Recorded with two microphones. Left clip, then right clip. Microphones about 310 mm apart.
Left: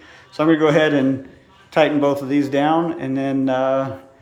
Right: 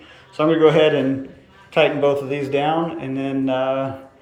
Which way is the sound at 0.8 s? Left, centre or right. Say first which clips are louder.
Right 1 dB; centre.